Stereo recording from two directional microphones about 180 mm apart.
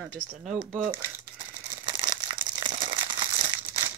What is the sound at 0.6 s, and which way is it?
Speech, 30° right (ahead or behind).